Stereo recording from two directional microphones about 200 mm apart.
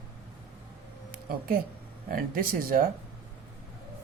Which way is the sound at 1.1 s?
45° right (ahead or behind).